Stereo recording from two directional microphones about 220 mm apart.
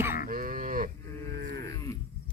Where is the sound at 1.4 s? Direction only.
50° right (ahead or behind).